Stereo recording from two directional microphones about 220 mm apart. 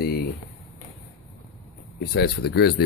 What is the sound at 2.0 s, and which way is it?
Speech, 45° left (ahead or behind).